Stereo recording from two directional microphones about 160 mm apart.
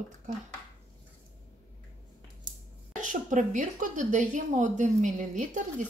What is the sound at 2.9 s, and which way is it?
A woman's voice, 55° right (ahead or behind).